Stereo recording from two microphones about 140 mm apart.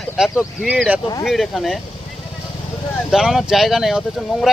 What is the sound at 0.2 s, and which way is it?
Speech, 5° right (ahead or behind).